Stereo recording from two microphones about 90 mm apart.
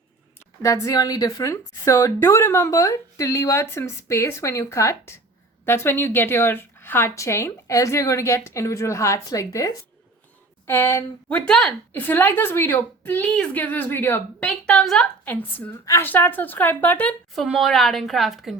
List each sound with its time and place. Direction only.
0.6 s a woman's voice: 40° left (ahead or behind)
11.3 s a woman's voice: 10° left (ahead or behind)
11.9 s a woman's voice: 20° left (ahead or behind)
13.3 s a woman's voice: 10° left (ahead or behind)
13.6 s a woman's voice: 20° left (ahead or behind)
14.4 s a woman's voice: 10° left (ahead or behind)
17.3 s a woman's voice: centre (ahead or behind)